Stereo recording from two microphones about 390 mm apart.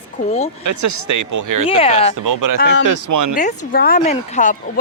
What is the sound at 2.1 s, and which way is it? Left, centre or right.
Speech, right.